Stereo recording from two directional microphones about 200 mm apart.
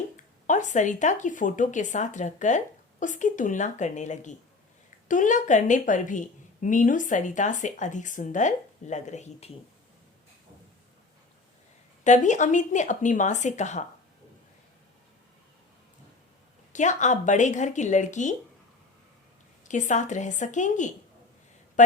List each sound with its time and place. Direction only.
0.2 s a woman's voice: 40° left (ahead or behind)
12.0 s a woman's voice: 35° left (ahead or behind)
16.7 s a woman's voice: 35° left (ahead or behind)
19.6 s a woman's voice: 40° left (ahead or behind)